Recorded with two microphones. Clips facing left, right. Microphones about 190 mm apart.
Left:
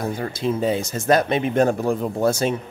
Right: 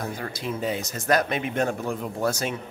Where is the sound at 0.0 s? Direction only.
25° left (ahead or behind).